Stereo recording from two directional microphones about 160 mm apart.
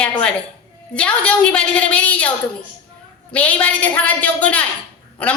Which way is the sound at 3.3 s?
10° left (ahead or behind).